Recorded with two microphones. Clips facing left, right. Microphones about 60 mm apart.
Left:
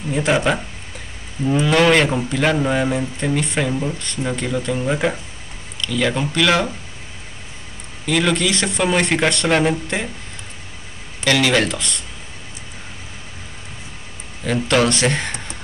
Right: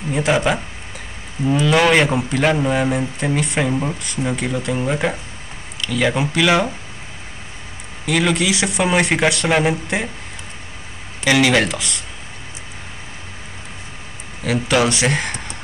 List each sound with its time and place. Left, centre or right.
0.1 s speech: centre
1.7 s a man's voice: centre
8.1 s a man's voice: centre
11.2 s a man's voice: centre
14.4 s speech: centre